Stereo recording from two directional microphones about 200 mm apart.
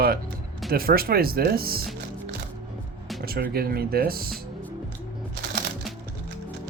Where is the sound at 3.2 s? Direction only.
50° right (ahead or behind).